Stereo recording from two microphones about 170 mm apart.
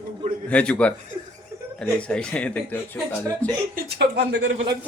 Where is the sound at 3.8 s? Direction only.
70° right (ahead or behind).